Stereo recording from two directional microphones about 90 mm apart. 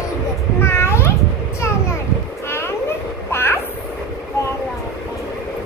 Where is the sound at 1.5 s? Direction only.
30° left (ahead or behind).